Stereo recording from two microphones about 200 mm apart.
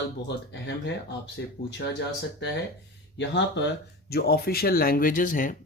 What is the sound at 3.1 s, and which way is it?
Speech, 60° left (ahead or behind).